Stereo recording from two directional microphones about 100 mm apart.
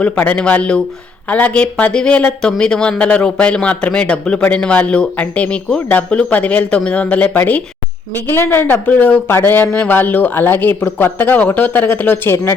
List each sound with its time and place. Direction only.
0.0 s speech: 15° left (ahead or behind)